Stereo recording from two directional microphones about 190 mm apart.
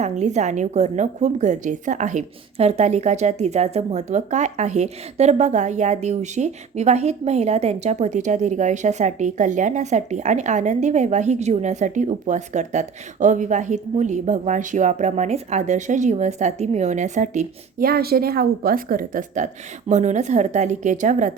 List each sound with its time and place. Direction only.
0.0 s a woman's voice: 35° right (ahead or behind)